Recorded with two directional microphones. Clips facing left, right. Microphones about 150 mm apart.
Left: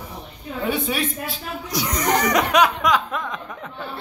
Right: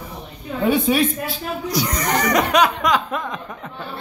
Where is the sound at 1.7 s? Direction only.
5° left (ahead or behind).